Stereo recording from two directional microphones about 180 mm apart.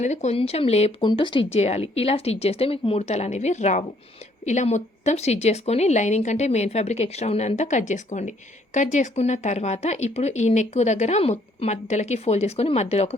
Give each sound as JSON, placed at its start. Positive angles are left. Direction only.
{"t": 0.0, "sound": "a woman's voice", "side_deg": 40}